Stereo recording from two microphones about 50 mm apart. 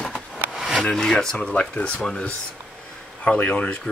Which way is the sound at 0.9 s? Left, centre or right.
Centre.